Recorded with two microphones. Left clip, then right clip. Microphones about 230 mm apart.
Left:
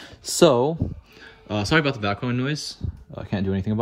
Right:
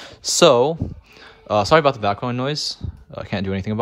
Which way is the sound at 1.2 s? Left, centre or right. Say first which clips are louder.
Right 9 dB; centre.